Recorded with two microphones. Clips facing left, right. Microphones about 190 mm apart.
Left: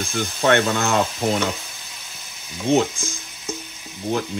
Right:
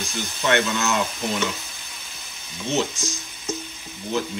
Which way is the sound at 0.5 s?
55° left (ahead or behind).